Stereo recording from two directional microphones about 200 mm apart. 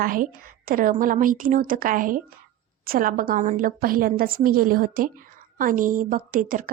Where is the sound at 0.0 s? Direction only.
45° right (ahead or behind).